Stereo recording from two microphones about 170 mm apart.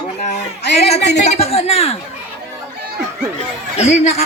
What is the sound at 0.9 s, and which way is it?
Music, 85° left.